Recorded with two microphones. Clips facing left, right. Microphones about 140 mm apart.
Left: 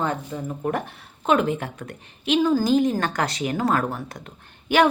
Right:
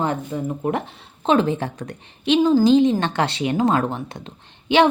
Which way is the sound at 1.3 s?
30° right (ahead or behind).